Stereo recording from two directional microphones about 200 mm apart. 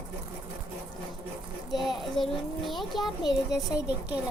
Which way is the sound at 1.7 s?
Centre (ahead or behind).